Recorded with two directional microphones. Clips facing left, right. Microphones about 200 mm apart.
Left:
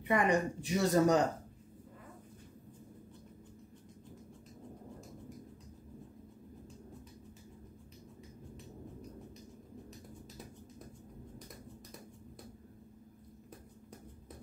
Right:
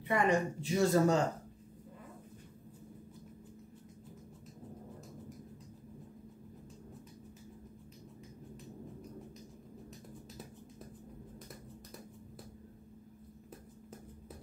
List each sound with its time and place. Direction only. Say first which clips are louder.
0.1 s a woman's voice: even; 15° left (ahead or behind)